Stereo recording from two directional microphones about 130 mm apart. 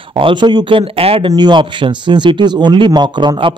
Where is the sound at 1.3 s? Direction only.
35° right (ahead or behind).